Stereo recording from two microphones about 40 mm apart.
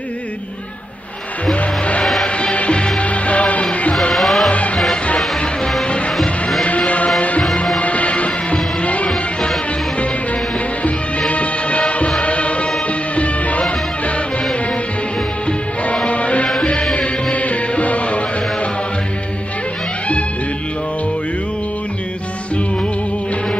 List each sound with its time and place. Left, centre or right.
1.4 s music: left
4.1 s music: centre
4.5 s music: left
5.9 s music: left
7.2 s music: left
10.8 s music: left
15.4 s music: left